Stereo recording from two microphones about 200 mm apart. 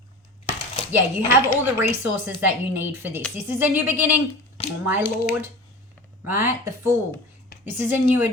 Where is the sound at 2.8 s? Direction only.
10° right (ahead or behind).